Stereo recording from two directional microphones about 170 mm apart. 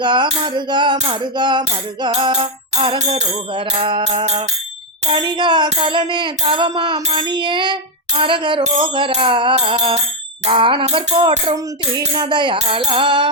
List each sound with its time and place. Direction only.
0.0 s music: 25° right (ahead or behind)